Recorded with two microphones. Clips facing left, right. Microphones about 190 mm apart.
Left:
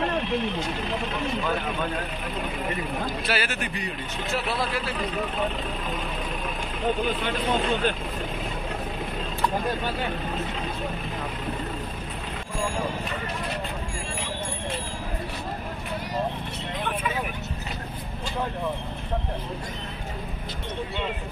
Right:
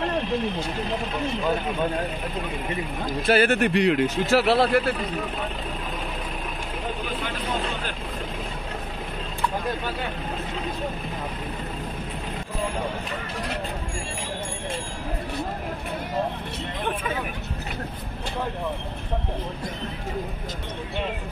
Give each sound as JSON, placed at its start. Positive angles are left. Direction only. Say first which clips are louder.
{"t": 3.3, "sound": "speech", "louder": "right 14 dB", "side_deg": -55}